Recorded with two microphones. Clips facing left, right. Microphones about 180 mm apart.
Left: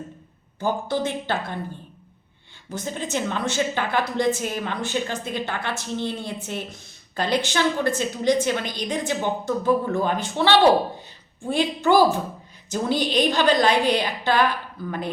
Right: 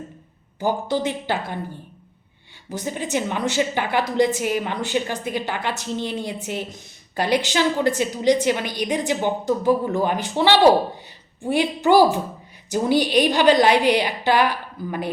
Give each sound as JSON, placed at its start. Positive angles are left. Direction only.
{"t": 0.6, "sound": "a woman's voice", "side_deg": -15}
{"t": 2.6, "sound": "a woman's voice", "side_deg": -15}